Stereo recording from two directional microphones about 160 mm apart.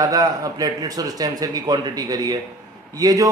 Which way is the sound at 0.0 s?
20° right (ahead or behind).